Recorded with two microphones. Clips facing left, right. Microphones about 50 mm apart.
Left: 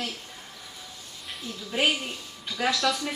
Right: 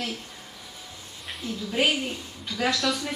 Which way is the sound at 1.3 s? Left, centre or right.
Centre.